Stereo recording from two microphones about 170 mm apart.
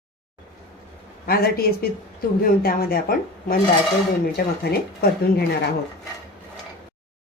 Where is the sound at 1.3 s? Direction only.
65° left (ahead or behind).